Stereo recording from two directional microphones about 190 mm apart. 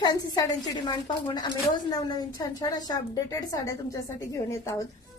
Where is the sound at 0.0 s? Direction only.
20° left (ahead or behind).